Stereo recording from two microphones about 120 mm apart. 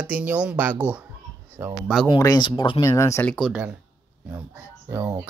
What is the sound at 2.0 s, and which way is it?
Speech, 35° left (ahead or behind).